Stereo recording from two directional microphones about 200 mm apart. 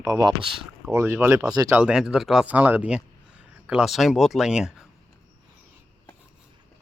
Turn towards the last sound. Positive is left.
turn(degrees=-5)  # may be behind; listen again after turning